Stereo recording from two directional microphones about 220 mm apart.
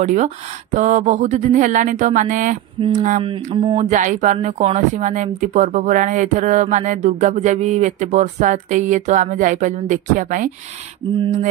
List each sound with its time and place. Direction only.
0.0 s speech: 30° right (ahead or behind)